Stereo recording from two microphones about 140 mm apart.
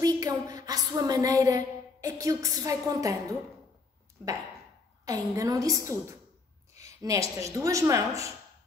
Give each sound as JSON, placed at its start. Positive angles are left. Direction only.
{"t": 0.0, "sound": "a woman's voice", "side_deg": -25}
{"t": 5.0, "sound": "a woman's voice", "side_deg": -25}